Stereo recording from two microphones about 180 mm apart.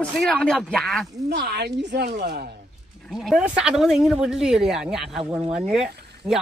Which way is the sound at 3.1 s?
Centre (ahead or behind).